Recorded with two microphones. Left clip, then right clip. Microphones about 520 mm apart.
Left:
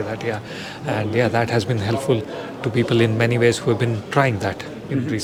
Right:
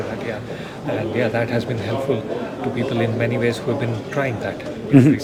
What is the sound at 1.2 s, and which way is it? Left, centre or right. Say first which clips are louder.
A man's voice: left 3 dB; left.